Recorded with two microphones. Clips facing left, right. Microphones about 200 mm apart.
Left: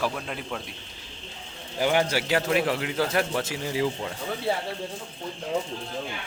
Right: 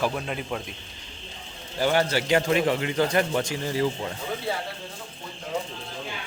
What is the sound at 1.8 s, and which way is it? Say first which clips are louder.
A man's voice: right 1 dB; 15° left (ahead or behind).